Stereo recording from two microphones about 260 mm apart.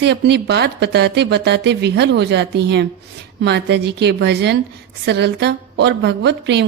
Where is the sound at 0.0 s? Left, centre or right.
Right.